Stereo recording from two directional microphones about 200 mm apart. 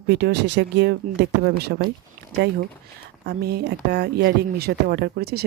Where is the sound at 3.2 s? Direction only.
55° right (ahead or behind).